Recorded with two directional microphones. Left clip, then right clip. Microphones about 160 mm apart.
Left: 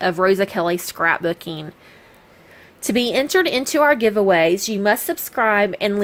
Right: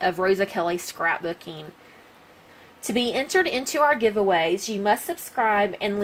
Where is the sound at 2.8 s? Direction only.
45° left (ahead or behind).